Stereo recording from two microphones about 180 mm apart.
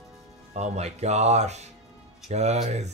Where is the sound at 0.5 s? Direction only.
40° right (ahead or behind).